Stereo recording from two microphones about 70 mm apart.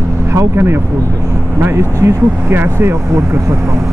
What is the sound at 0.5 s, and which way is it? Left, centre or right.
Speech, right.